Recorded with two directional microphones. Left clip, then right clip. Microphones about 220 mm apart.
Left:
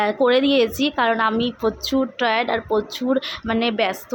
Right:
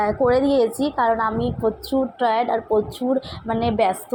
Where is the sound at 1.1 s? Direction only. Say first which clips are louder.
Left 1 dB; 25° left (ahead or behind).